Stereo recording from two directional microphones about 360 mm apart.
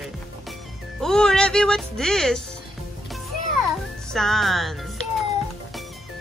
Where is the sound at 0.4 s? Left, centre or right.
Centre.